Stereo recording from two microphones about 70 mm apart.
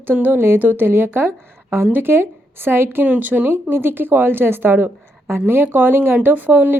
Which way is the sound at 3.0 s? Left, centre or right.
Right.